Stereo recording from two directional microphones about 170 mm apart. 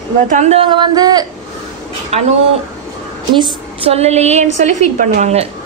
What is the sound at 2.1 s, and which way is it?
Speech, 40° right (ahead or behind).